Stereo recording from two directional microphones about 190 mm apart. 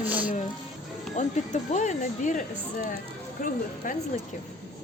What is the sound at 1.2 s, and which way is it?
Speech, 40° left (ahead or behind).